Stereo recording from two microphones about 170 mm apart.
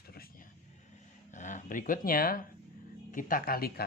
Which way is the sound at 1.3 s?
45° left (ahead or behind).